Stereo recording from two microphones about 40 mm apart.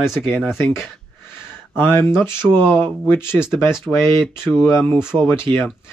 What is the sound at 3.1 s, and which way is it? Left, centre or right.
Speech, left.